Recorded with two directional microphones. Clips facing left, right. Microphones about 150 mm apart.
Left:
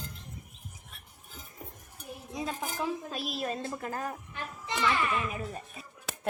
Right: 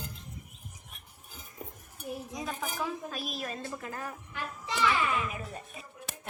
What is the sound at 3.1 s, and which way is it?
Speech, 30° left (ahead or behind).